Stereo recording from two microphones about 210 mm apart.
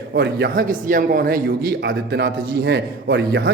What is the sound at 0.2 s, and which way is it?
A man's voice, 50° right (ahead or behind).